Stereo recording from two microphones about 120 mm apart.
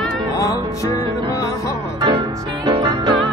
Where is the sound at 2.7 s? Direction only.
40° right (ahead or behind).